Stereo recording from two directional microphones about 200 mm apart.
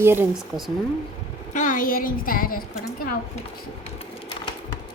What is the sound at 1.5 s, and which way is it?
A woman's voice, 40° left (ahead or behind).